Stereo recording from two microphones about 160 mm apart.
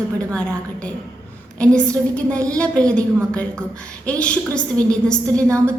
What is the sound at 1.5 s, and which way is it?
A woman's voice, 5° left (ahead or behind).